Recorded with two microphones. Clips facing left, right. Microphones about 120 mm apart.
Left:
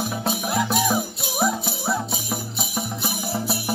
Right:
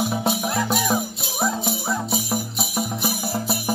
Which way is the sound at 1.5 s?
15° right (ahead or behind).